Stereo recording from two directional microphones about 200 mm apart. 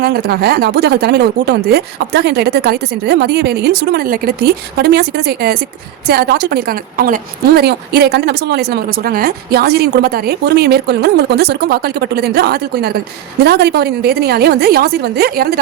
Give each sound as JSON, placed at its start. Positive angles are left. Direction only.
{"t": 0.0, "sound": "a woman's voice", "side_deg": -50}